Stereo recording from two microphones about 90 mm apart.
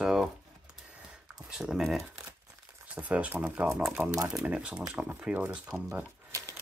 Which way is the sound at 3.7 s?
5° right (ahead or behind).